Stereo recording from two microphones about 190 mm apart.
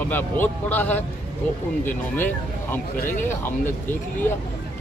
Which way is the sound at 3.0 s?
40° left (ahead or behind).